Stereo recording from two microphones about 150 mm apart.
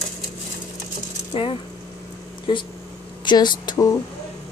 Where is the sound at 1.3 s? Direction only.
35° left (ahead or behind).